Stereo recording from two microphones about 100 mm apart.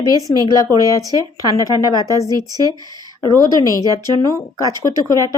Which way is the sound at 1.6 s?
35° left (ahead or behind).